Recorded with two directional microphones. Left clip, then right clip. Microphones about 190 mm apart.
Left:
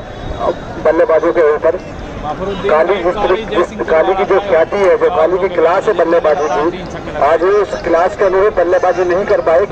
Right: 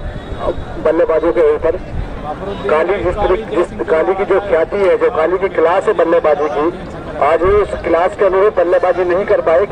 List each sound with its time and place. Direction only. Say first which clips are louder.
0.8 s speech: left 2 dB; 15° right (ahead or behind)
2.7 s speech: left 2 dB; 20° right (ahead or behind)